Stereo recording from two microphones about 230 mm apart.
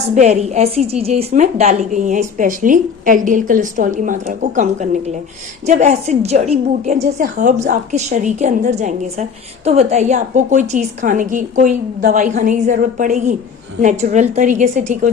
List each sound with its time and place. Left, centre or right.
0.1 s a woman's voice: right